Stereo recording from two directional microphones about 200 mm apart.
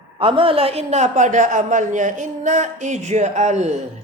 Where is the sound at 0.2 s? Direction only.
25° right (ahead or behind).